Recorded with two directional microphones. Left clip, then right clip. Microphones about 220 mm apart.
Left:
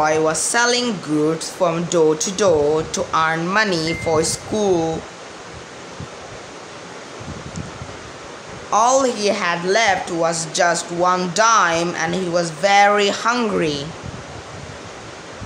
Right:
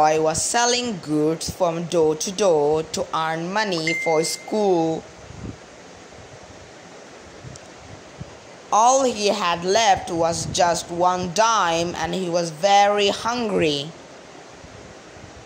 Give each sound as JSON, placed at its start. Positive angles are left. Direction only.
{"t": 0.0, "sound": "a woman's voice", "side_deg": -15}
{"t": 8.6, "sound": "a woman's voice", "side_deg": -15}